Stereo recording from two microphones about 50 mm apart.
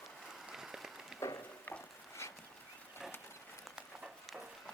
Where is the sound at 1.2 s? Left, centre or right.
Left.